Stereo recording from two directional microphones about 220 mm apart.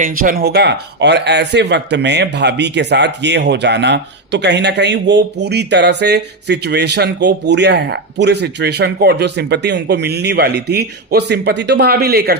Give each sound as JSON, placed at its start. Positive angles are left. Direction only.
{"t": 0.0, "sound": "speech", "side_deg": -40}